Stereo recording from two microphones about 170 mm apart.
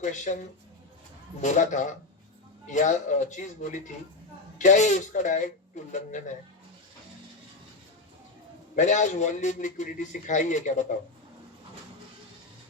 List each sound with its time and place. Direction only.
0.0 s a man's voice: 45° left (ahead or behind)
1.4 s a man's voice: 45° left (ahead or behind)
8.7 s a man's voice: 45° left (ahead or behind)